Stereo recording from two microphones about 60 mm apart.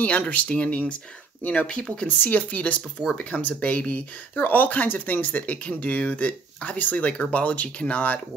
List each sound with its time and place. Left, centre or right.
0.0 s speech: left
1.7 s speech: centre
2.0 s speech: left